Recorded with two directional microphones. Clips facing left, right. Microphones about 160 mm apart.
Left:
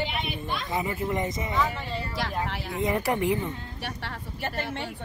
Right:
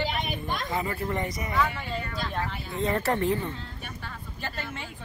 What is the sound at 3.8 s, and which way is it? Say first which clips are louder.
Speech: left 5 dB; 75° left (ahead or behind).